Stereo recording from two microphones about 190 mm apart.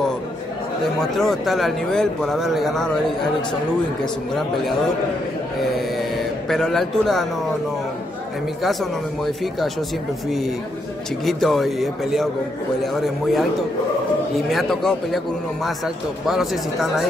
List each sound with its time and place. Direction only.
1.1 s speech: centre (ahead or behind)
6.1 s speech: centre (ahead or behind)
9.2 s speech: centre (ahead or behind)
11.2 s speech: centre (ahead or behind)
14.5 s speech: centre (ahead or behind)
16.3 s speech: centre (ahead or behind)